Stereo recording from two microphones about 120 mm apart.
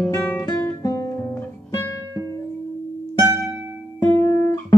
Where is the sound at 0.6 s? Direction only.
25° left (ahead or behind).